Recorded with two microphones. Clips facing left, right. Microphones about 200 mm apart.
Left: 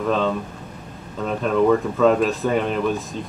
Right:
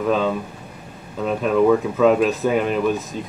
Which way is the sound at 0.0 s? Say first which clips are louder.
Right 1 dB; 5° right (ahead or behind).